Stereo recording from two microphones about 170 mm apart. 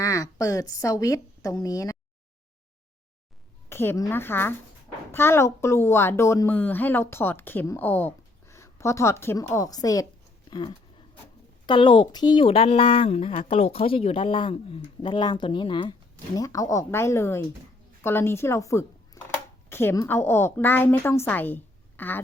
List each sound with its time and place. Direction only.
0.0 s a woman's voice: 20° left (ahead or behind)
3.7 s a woman's voice: 15° left (ahead or behind)